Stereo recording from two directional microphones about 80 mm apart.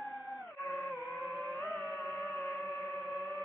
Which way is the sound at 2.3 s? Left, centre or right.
Centre.